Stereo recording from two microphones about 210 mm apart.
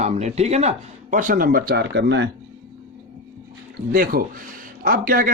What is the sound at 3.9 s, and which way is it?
Speech, 40° right (ahead or behind).